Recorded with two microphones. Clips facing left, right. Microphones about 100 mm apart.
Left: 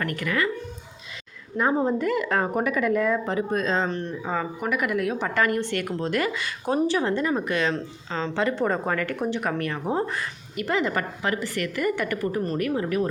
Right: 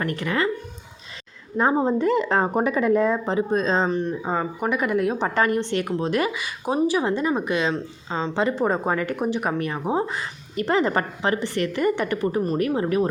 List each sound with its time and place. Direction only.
0.0 s speech: 25° right (ahead or behind)
1.5 s speech: 25° right (ahead or behind)
3.8 s speech: 15° right (ahead or behind)
10.6 s speech: 35° right (ahead or behind)